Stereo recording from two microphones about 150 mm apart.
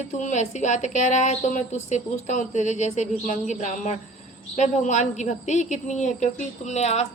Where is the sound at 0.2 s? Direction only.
55° left (ahead or behind).